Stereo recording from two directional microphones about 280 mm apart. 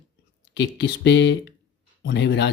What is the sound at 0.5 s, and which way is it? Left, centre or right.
Speech, left.